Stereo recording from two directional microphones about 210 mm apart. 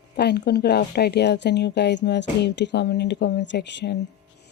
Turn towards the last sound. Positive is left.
turn(degrees=55)  # may be behind; listen again after turning